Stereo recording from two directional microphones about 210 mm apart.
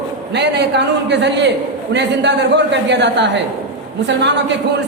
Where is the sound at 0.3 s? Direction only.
55° right (ahead or behind).